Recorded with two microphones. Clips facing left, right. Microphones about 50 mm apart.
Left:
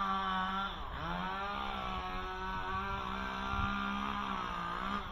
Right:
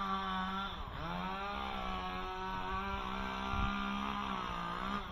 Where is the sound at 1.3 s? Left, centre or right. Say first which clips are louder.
Left 2 dB; centre.